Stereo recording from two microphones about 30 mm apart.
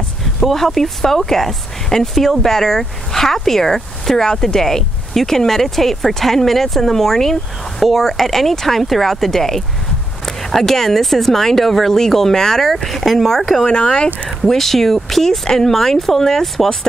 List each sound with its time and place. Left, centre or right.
0.5 s speech: centre
4.3 s speech: left
4.6 s speech: centre
8.1 s speech: centre
12.7 s speech: centre
13.7 s speech: left
14.4 s speech: centre